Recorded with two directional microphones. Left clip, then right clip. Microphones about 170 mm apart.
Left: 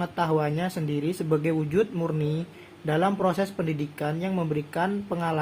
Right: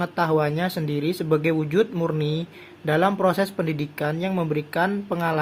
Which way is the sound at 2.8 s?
55° right (ahead or behind).